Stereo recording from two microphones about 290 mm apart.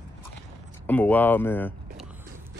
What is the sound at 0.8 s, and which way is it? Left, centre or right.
Speech, centre.